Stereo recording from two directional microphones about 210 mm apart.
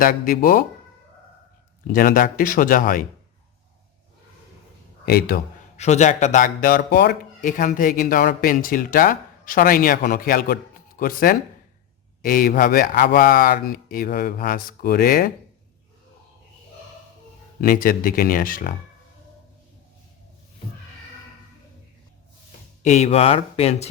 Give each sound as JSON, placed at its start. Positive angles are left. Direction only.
{"t": 0.0, "sound": "speech", "side_deg": 40}
{"t": 1.9, "sound": "speech", "side_deg": 40}
{"t": 5.0, "sound": "speech", "side_deg": 45}
{"t": 5.7, "sound": "speech", "side_deg": 35}
{"t": 17.6, "sound": "speech", "side_deg": 45}
{"t": 22.8, "sound": "speech", "side_deg": 35}